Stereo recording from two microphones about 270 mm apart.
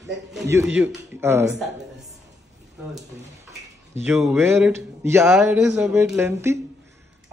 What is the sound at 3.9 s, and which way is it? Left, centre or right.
Speech, centre.